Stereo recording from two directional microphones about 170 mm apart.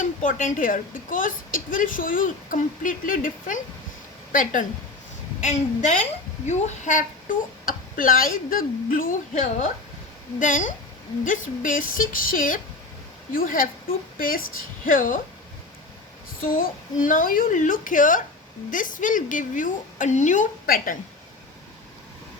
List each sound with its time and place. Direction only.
0.0 s a woman's voice: 50° left (ahead or behind)
16.4 s a woman's voice: 55° left (ahead or behind)